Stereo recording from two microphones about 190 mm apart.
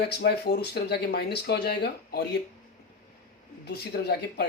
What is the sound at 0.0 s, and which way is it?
Speech, 55° left (ahead or behind).